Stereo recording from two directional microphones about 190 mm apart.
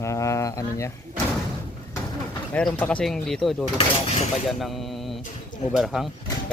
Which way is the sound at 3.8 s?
35° left (ahead or behind).